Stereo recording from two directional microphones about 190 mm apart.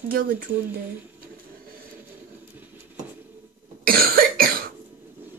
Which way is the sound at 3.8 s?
50° right (ahead or behind).